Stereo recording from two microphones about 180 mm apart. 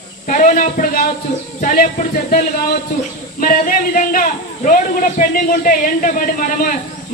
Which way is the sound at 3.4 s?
50° left (ahead or behind).